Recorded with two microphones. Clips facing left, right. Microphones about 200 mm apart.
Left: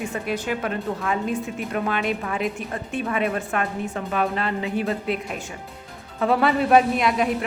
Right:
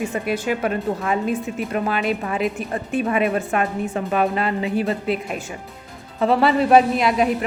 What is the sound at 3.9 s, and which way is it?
Speech, 25° right (ahead or behind).